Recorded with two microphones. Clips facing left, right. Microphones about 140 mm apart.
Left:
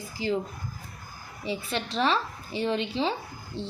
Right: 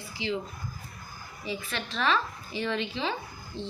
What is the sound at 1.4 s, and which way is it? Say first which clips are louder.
A woman's voice: left 4 dB; 35° left (ahead or behind).